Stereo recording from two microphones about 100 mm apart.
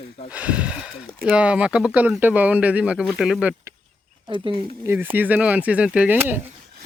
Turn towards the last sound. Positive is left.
turn(degrees=-20)  # may be behind; listen again after turning